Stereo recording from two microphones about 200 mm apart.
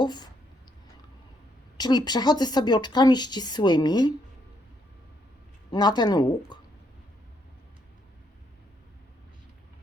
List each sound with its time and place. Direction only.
0.0 s speech: 20° left (ahead or behind)
1.8 s speech: 20° left (ahead or behind)
5.7 s speech: 20° left (ahead or behind)